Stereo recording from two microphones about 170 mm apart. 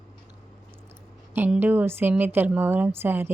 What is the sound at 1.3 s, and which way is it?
A woman's voice, 10° right (ahead or behind).